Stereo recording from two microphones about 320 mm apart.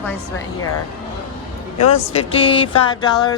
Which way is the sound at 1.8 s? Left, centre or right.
Centre.